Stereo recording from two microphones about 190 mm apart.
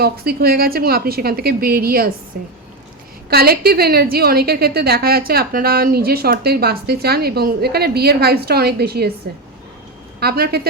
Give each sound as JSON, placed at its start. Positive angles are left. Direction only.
{"t": 0.0, "sound": "a woman's voice", "side_deg": -55}
{"t": 10.2, "sound": "a woman's voice", "side_deg": -55}